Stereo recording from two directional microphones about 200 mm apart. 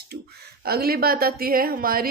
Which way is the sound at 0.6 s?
50° right (ahead or behind).